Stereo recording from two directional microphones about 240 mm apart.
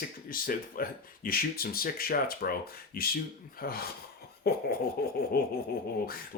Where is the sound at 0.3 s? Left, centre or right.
Left.